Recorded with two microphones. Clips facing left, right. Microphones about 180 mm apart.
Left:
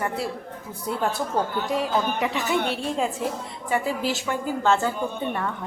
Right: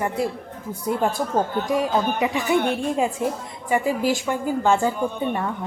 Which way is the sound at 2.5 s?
55° right (ahead or behind).